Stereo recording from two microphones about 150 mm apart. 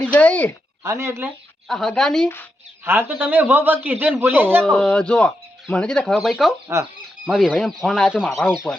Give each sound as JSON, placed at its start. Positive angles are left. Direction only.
{"t": 0.0, "sound": "speech", "side_deg": 10}
{"t": 0.8, "sound": "a man's voice", "side_deg": -20}
{"t": 1.6, "sound": "a woman's voice", "side_deg": 0}
{"t": 2.8, "sound": "a man's voice", "side_deg": -15}
{"t": 4.6, "sound": "speech", "side_deg": 5}
{"t": 6.7, "sound": "a man's voice", "side_deg": -15}
{"t": 7.3, "sound": "speech", "side_deg": -5}